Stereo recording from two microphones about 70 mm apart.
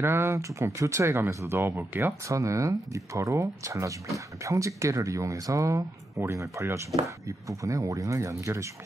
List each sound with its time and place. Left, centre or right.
0.0 s speech: right
2.2 s speech: right